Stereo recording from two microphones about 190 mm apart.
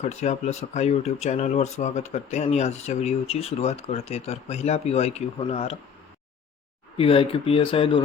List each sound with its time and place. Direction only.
0.0 s speech: 35° left (ahead or behind)
6.9 s speech: 30° left (ahead or behind)